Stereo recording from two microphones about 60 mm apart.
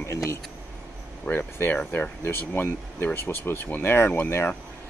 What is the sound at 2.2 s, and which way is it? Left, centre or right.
Speech, left.